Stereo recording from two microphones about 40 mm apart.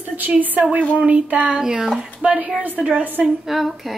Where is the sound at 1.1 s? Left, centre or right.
Right.